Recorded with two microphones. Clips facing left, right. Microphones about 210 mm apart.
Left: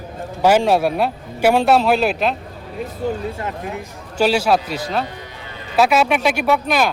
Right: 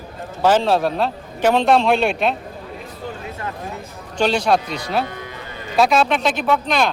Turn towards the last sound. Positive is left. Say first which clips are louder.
# left 1 dB
turn(degrees=10)  # may be behind; listen again after turning